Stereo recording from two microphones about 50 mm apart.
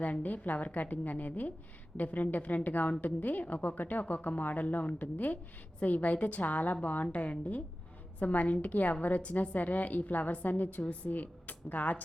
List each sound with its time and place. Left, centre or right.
0.0 s a woman's voice: left